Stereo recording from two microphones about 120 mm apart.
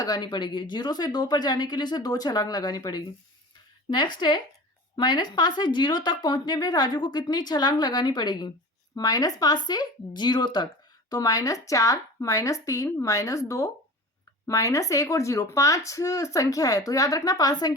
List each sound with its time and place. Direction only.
0.0 s speech: 35° left (ahead or behind)